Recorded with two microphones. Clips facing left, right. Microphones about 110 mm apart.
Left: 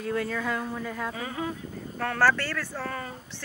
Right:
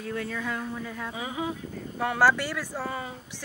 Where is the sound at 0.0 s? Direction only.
45° left (ahead or behind).